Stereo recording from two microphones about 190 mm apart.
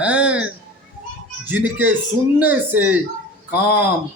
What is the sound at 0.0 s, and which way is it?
A man's voice, 5° right (ahead or behind).